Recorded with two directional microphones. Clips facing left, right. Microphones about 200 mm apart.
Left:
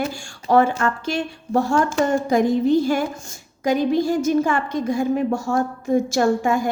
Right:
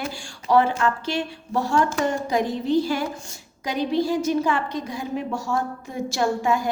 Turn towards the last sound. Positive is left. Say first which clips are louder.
# left 4 dB
turn(degrees=50)  # may be behind; listen again after turning